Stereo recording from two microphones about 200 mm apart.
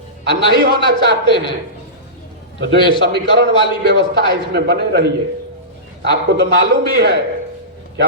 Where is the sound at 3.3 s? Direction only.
60° right (ahead or behind).